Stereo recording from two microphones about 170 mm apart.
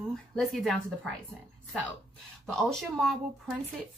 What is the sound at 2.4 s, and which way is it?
Speech, centre (ahead or behind).